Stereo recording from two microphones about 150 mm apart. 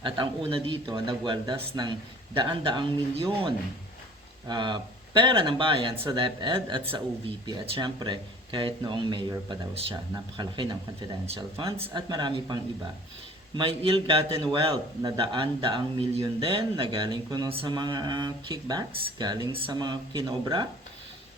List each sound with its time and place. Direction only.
0.0 s speech: 35° right (ahead or behind)
13.6 s speech: 35° right (ahead or behind)